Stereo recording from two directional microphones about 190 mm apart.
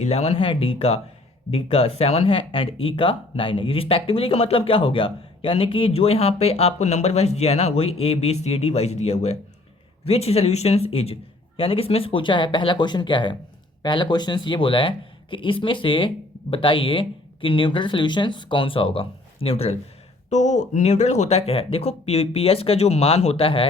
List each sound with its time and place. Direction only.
0.0 s speech: 35° left (ahead or behind)